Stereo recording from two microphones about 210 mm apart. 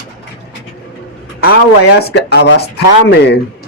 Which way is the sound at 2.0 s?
50° left (ahead or behind).